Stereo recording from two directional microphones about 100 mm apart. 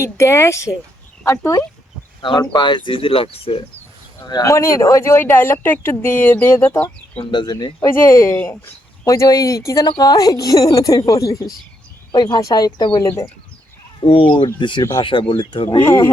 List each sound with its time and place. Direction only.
0.0 s speech: 30° left (ahead or behind)
2.6 s speech: 50° left (ahead or behind); by 3.6 s 70° left (ahead or behind)
4.4 s speech: 30° left (ahead or behind)
7.2 s speech: 50° left (ahead or behind)
7.5 s a woman's voice: 40° left (ahead or behind)
7.9 s speech: 25° left (ahead or behind)
9.0 s a woman's voice: 35° left (ahead or behind)
13.0 s a woman's voice: 30° left (ahead or behind)
14.0 s speech: 60° left (ahead or behind)
14.4 s speech: 50° left (ahead or behind)